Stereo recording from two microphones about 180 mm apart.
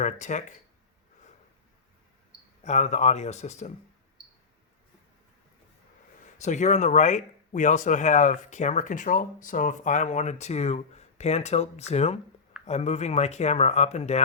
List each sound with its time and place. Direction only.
0.0 s speech: 40° left (ahead or behind)
2.6 s speech: 40° left (ahead or behind)
6.2 s speech: 40° left (ahead or behind)